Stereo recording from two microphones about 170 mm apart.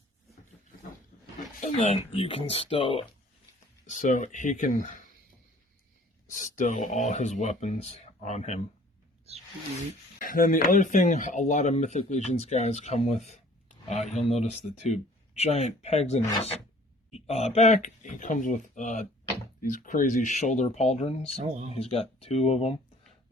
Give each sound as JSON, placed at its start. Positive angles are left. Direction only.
{"t": 1.6, "sound": "speech", "side_deg": 40}
{"t": 3.8, "sound": "speech", "side_deg": 45}
{"t": 6.3, "sound": "speech", "side_deg": 50}
{"t": 10.2, "sound": "speech", "side_deg": 55}
{"t": 21.2, "sound": "speech", "side_deg": -45}
{"t": 21.7, "sound": "speech", "side_deg": 35}